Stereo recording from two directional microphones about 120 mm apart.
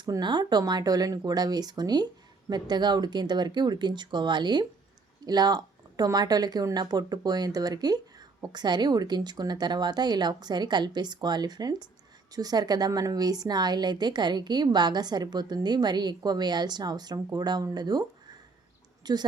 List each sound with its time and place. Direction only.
0.0 s speech: 35° right (ahead or behind)
19.1 s speech: 35° right (ahead or behind)